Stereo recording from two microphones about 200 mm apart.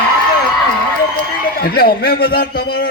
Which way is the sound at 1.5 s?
50° left (ahead or behind).